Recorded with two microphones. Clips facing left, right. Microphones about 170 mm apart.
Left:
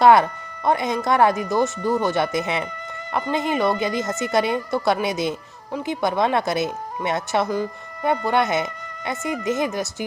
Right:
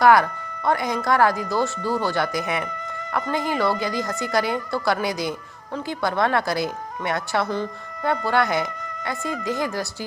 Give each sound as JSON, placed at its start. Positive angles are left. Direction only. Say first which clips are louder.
{"t": 0.0, "sound": "speech", "louder": "left 2 dB", "side_deg": 25}